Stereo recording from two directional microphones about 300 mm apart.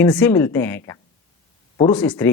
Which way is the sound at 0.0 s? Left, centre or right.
Centre.